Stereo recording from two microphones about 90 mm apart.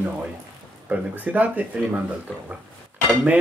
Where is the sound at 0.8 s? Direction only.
20° right (ahead or behind).